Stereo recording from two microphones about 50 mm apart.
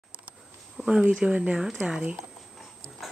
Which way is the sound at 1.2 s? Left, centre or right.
Right.